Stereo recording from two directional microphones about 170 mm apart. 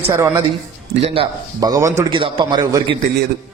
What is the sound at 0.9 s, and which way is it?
Speech, 35° right (ahead or behind).